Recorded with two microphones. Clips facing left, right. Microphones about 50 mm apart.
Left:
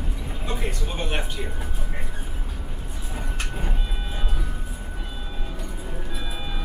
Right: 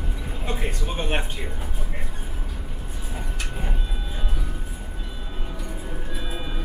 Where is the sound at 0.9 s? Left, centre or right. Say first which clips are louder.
Right 3 dB; centre.